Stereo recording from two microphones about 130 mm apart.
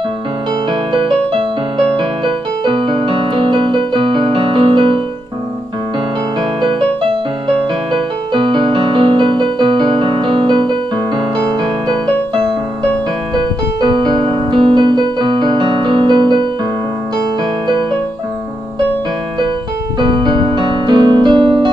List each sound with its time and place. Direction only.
1.3 s music: 40° right (ahead or behind)
6.6 s music: 40° right (ahead or behind)
13.7 s keyboard: 35° right (ahead or behind)
20.0 s music: 35° right (ahead or behind)